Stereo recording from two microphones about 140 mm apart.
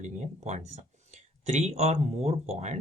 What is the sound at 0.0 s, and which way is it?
Speech, 55° right (ahead or behind).